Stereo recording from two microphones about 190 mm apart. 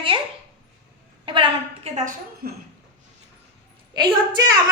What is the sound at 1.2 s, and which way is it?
Speech, 25° right (ahead or behind).